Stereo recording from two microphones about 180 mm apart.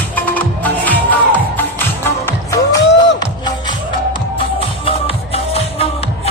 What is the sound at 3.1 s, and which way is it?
Music, 25° left (ahead or behind).